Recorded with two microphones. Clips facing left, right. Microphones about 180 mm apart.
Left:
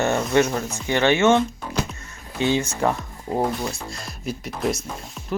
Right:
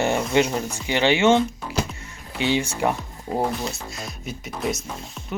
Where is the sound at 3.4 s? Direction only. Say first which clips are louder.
Left 1 dB; centre (ahead or behind).